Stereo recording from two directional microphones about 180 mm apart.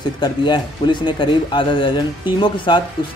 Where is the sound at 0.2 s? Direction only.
25° left (ahead or behind).